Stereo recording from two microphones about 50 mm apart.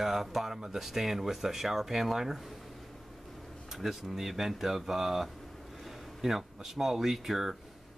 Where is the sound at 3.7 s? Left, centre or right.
Centre.